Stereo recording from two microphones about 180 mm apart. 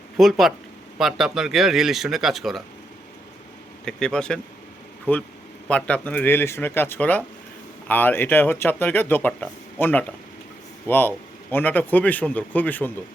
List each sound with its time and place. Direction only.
0.2 s speech: centre (ahead or behind)
3.8 s speech: 5° left (ahead or behind)